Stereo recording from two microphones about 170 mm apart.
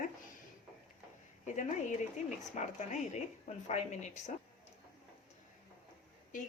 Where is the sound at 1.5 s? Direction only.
45° left (ahead or behind).